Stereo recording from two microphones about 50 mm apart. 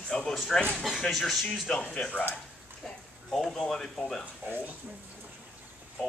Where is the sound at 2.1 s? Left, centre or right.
Left.